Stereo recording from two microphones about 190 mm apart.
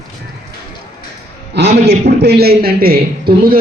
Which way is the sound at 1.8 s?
60° right (ahead or behind).